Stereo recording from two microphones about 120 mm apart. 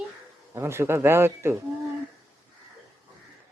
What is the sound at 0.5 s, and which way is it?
Speech, 20° right (ahead or behind).